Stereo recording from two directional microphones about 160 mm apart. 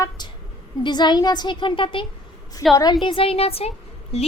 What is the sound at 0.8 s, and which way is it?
A woman's voice, 30° left (ahead or behind).